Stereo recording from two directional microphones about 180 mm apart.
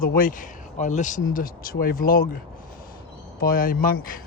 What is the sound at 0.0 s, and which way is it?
Speech, 50° left (ahead or behind).